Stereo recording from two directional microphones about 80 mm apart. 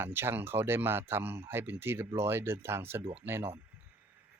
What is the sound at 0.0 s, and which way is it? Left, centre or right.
Speech, right.